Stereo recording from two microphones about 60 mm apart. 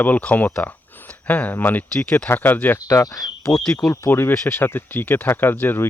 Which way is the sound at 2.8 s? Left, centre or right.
Left.